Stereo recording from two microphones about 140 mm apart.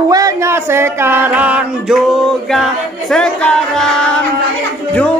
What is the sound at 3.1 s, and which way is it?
Music, 5° left (ahead or behind).